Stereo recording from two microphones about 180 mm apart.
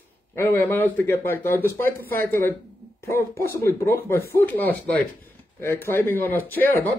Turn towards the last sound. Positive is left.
turn(degrees=10)  # may be behind; listen again after turning